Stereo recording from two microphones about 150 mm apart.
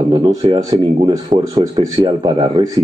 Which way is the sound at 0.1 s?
30° right (ahead or behind).